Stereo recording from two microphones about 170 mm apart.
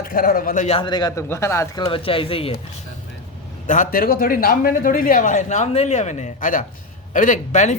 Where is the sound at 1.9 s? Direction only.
30° left (ahead or behind).